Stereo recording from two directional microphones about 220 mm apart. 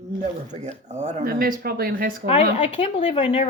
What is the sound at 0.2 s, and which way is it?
Speech, 30° right (ahead or behind).